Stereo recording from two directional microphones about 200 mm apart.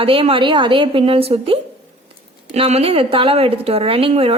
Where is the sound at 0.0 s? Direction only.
25° right (ahead or behind).